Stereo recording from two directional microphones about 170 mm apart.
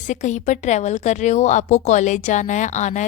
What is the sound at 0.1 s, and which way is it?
A woman's voice, 45° left (ahead or behind).